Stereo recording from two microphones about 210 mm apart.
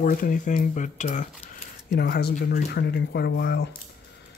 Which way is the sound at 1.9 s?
50° left (ahead or behind).